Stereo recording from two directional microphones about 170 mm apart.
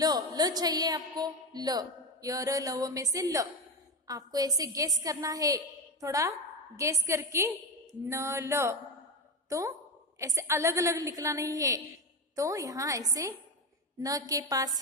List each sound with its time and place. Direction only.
0.0 s a woman's voice: 20° right (ahead or behind)